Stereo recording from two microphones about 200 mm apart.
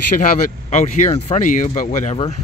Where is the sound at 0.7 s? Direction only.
35° left (ahead or behind).